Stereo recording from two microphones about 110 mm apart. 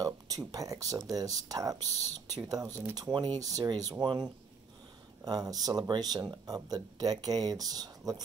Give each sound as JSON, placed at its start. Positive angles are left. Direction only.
{"t": 0.0, "sound": "speech", "side_deg": -35}